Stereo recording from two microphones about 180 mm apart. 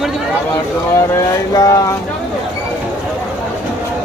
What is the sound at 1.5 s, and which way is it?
Speech, 20° left (ahead or behind).